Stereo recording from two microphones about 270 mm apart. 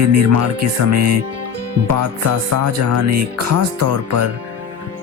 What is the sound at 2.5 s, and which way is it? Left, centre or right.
Music, right.